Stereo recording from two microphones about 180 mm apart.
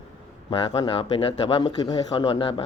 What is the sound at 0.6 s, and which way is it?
Speech, 30° left (ahead or behind).